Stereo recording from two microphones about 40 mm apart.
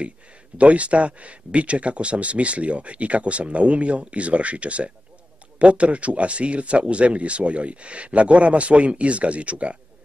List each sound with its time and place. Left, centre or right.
0.6 s speech: right